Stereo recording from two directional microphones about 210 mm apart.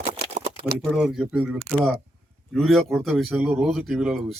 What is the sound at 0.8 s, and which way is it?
A man's voice, 5° right (ahead or behind).